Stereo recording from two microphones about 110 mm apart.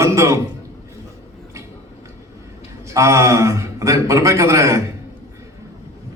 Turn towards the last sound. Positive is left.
turn(degrees=-30)  # may be behind; listen again after turning